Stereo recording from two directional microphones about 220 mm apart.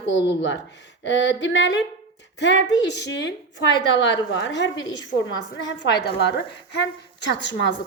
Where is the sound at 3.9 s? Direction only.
55° left (ahead or behind).